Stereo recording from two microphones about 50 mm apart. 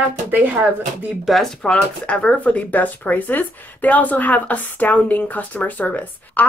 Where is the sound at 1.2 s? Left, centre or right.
Centre.